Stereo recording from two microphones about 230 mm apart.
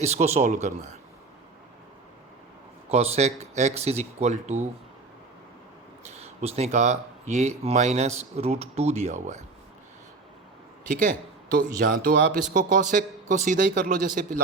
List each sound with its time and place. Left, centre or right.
0.0 s speech: right
2.9 s speech: right
6.1 s speech: right
11.0 s speech: right